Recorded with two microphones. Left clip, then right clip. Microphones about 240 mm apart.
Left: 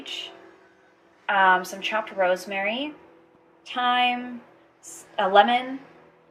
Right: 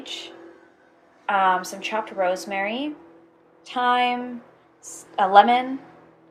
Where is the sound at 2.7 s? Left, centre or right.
Centre.